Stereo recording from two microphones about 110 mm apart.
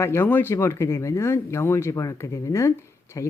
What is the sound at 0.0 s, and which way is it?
Speech, 20° left (ahead or behind).